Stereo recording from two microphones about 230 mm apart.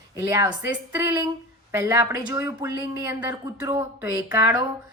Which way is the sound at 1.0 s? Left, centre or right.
Centre.